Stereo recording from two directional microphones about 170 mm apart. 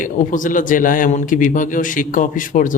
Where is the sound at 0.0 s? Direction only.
50° left (ahead or behind).